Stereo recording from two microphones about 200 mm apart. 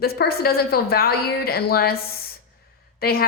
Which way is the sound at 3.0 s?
50° left (ahead or behind).